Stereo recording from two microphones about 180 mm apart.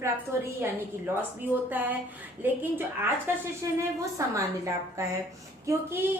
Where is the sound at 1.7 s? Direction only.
10° right (ahead or behind).